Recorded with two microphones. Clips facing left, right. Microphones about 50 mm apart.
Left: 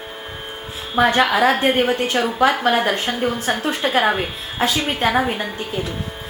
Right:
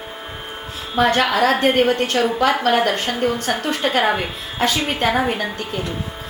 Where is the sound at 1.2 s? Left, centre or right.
Left.